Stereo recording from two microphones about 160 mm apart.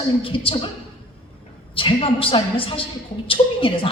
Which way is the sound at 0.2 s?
35° left (ahead or behind).